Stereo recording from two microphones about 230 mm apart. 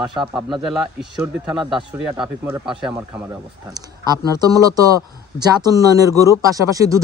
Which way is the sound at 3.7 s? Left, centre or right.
Centre.